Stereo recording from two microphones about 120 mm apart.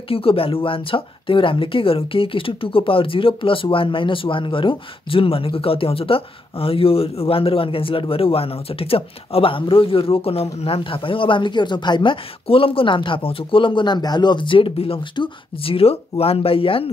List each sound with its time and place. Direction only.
0.1 s speech: 50° left (ahead or behind)